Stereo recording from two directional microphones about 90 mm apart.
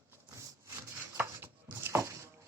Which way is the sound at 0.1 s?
30° right (ahead or behind).